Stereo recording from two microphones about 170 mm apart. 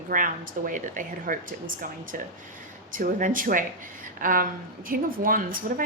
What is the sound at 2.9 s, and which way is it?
A woman's voice, 55° right (ahead or behind).